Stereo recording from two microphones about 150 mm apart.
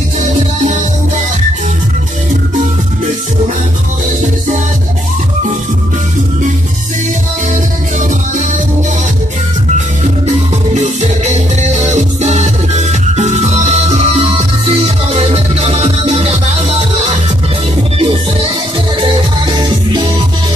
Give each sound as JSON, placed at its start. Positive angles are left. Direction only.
{"t": 8.0, "sound": "music", "side_deg": -55}
{"t": 10.7, "sound": "music", "side_deg": -50}
{"t": 18.9, "sound": "music", "side_deg": -30}